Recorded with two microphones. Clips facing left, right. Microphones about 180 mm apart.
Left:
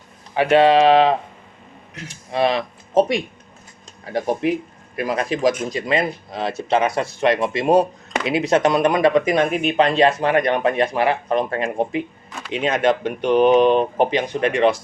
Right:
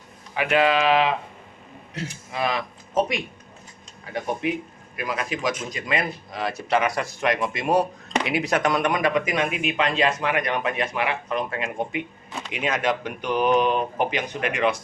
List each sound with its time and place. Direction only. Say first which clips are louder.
0.3 s speech: left 7 dB; 30° left (ahead or behind)
2.0 s speech: right 4 dB; 30° right (ahead or behind)
2.3 s speech: left 7 dB; 30° left (ahead or behind)